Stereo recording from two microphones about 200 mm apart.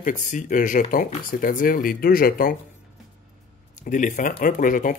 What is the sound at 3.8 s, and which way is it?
Speech, 40° left (ahead or behind).